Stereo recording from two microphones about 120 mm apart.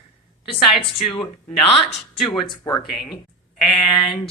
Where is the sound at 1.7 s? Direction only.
65° left (ahead or behind).